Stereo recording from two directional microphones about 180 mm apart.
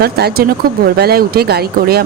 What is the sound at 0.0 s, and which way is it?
A woman's voice, 60° right (ahead or behind).